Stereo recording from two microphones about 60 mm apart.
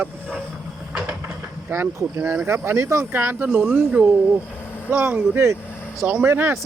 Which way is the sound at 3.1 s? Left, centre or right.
Right.